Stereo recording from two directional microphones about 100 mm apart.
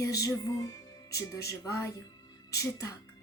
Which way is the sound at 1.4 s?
35° left (ahead or behind).